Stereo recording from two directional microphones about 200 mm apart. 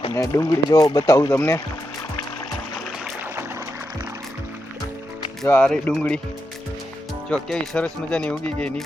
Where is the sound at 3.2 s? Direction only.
10° right (ahead or behind).